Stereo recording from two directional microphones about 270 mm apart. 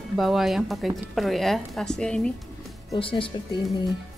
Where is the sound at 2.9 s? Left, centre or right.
Centre.